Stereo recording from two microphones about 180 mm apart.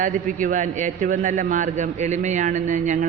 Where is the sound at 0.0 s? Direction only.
45° right (ahead or behind).